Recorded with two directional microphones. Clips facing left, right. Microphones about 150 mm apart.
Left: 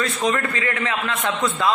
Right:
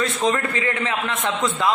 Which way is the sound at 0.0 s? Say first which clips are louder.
Right 1 dB; 25° right (ahead or behind).